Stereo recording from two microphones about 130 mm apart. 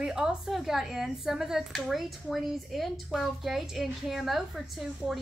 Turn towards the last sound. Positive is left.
turn(degrees=0)  # may be behind; listen again after turning